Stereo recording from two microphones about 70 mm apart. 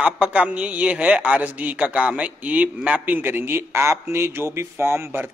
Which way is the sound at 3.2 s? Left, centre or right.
Right.